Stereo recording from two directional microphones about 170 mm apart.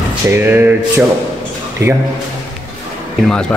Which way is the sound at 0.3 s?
15° right (ahead or behind).